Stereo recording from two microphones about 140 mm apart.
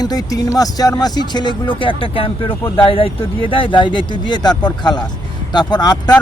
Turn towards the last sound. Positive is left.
turn(degrees=30)  # may be behind; listen again after turning